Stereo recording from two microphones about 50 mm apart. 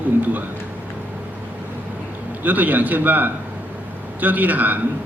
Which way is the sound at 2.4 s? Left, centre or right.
Right.